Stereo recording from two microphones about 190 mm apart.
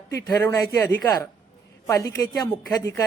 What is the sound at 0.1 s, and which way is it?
Speech, 15° left (ahead or behind).